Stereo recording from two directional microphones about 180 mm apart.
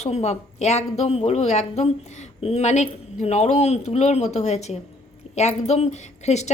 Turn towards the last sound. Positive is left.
turn(degrees=40)  # may be behind; listen again after turning